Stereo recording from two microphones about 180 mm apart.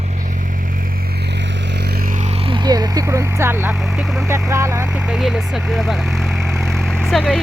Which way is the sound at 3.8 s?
Centre (ahead or behind).